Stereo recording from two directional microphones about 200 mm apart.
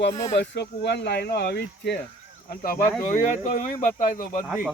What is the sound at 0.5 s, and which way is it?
Speech, 60° left (ahead or behind).